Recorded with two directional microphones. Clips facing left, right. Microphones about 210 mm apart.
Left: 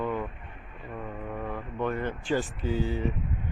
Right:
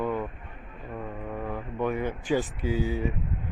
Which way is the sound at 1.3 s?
10° right (ahead or behind).